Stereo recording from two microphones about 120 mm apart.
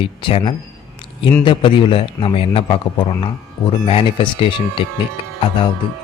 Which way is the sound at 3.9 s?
50° left (ahead or behind).